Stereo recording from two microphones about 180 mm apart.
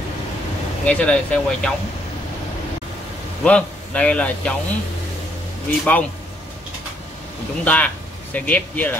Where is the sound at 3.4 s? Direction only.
5° left (ahead or behind).